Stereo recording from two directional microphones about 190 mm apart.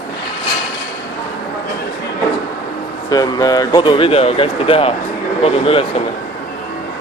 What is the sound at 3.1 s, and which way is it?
Speech, 20° left (ahead or behind).